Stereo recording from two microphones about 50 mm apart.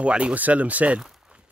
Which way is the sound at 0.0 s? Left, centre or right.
Right.